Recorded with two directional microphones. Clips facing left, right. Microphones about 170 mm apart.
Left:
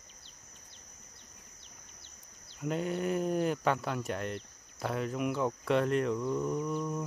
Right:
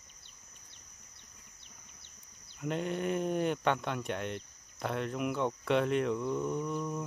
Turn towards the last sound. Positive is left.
turn(degrees=0)  # may be behind; listen again after turning